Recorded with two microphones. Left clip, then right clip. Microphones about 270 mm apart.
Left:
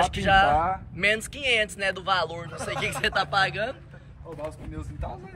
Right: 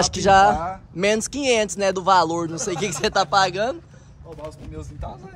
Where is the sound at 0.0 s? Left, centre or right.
Centre.